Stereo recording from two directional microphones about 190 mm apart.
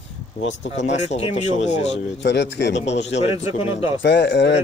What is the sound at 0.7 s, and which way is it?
A man's voice, 40° left (ahead or behind).